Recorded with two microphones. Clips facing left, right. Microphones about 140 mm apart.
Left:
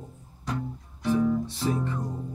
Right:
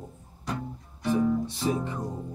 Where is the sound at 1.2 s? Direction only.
10° right (ahead or behind).